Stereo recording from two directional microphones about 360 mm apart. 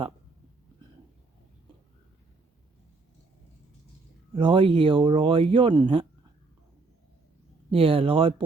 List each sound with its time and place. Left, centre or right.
4.4 s speech: centre
7.7 s speech: centre